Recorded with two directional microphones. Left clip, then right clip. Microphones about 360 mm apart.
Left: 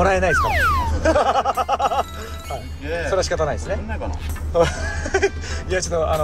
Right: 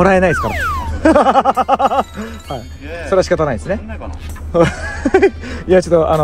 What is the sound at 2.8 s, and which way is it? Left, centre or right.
Speech, centre.